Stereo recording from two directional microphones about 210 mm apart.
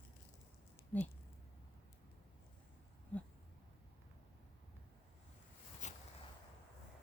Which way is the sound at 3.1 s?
5° left (ahead or behind).